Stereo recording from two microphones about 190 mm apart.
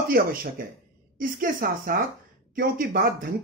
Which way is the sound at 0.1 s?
50° right (ahead or behind).